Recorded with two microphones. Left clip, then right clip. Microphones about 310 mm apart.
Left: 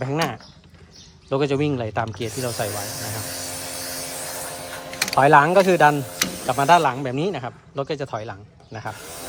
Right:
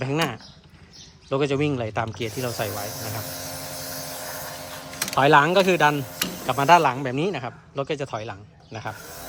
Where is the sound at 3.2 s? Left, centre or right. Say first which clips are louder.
Left 3 dB; left.